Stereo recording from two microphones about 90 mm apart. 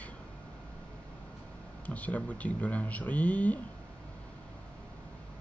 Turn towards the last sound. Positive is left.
turn(degrees=15)  # may be behind; listen again after turning